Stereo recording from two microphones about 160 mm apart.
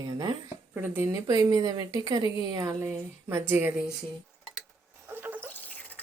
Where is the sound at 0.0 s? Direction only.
25° right (ahead or behind).